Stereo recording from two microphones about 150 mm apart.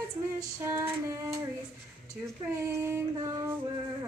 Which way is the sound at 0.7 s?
15° right (ahead or behind).